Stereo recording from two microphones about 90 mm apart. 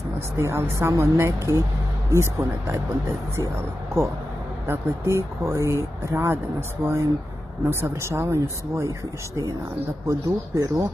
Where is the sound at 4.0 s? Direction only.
30° right (ahead or behind).